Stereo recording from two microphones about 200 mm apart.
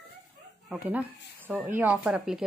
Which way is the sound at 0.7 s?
5° right (ahead or behind).